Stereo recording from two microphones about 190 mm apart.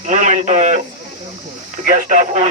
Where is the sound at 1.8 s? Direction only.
45° right (ahead or behind).